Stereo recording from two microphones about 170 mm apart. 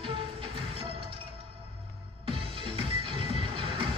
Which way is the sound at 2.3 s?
30° right (ahead or behind).